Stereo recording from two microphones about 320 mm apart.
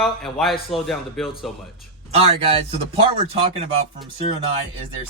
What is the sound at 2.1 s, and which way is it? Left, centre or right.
Speech, centre.